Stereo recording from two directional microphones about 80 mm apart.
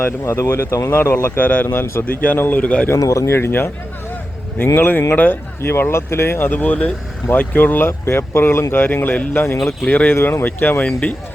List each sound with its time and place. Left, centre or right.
0.0 s speech: left
1.1 s speech: left
2.9 s speech: left
3.3 s speech: left